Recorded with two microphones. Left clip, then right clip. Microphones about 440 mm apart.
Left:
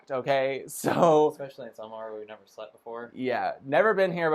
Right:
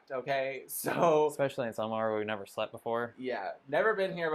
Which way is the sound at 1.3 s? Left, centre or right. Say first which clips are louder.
Right 7 dB; right.